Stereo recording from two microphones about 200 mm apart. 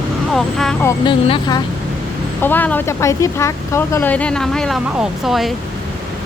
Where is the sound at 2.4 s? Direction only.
10° left (ahead or behind).